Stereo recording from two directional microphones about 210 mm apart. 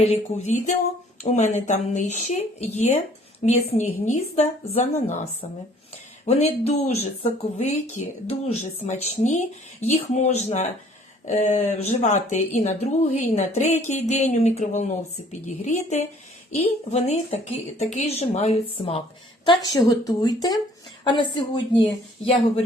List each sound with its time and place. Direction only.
0.0 s speech: 30° left (ahead or behind)
6.2 s a woman's voice: 30° left (ahead or behind)
19.5 s a woman's voice: 15° left (ahead or behind)